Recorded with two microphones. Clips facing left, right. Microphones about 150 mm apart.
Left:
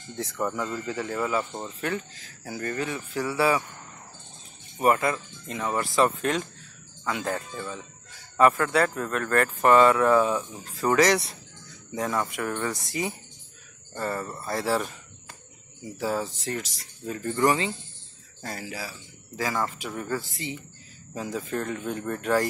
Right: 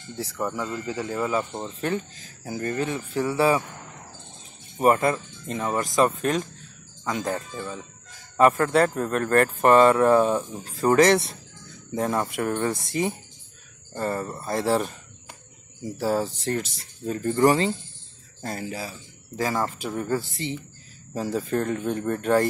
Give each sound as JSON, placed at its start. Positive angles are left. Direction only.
{"t": 0.3, "sound": "speech", "side_deg": -5}
{"t": 4.7, "sound": "speech", "side_deg": -25}
{"t": 8.5, "sound": "speech", "side_deg": -30}
{"t": 12.7, "sound": "speech", "side_deg": -50}
{"t": 13.9, "sound": "speech", "side_deg": -20}
{"t": 15.8, "sound": "speech", "side_deg": -35}
{"t": 18.4, "sound": "speech", "side_deg": -25}